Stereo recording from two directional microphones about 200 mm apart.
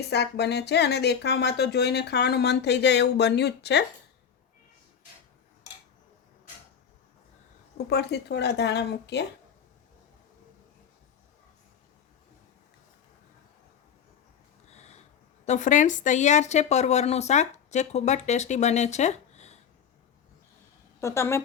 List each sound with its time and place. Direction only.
0.1 s speech: 55° left (ahead or behind)
7.9 s speech: 55° left (ahead or behind)
14.7 s a sound: 35° left (ahead or behind)
15.4 s a woman's voice: 40° left (ahead or behind)
21.0 s a woman's voice: 15° left (ahead or behind)